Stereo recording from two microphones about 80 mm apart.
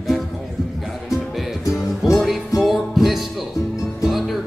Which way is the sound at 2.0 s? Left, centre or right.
Centre.